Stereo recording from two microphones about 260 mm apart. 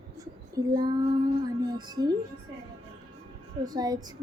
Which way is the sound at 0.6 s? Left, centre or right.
Centre.